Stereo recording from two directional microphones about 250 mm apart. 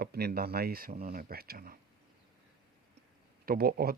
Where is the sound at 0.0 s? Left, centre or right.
Right.